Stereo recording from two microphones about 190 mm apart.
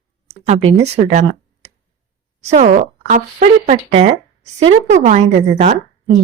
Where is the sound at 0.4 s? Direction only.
35° right (ahead or behind).